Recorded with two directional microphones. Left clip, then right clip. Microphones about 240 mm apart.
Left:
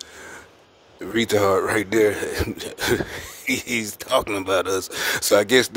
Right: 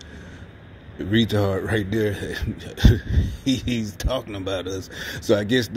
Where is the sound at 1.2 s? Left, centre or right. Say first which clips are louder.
Left 5 dB; left.